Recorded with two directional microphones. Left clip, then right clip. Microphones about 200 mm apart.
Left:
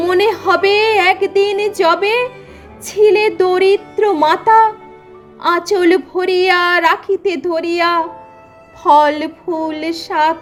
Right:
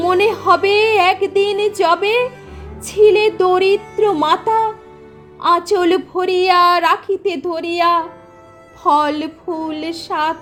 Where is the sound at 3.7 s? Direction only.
15° left (ahead or behind).